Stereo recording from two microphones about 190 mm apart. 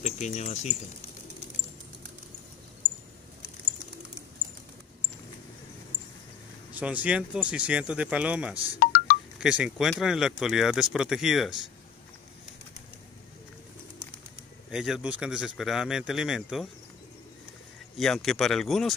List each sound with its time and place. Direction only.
0.0 s speech: 35° left (ahead or behind)
6.7 s speech: 5° right (ahead or behind)
8.6 s music: 50° left (ahead or behind)
9.4 s speech: 5° right (ahead or behind)
14.7 s speech: centre (ahead or behind)
17.9 s speech: centre (ahead or behind)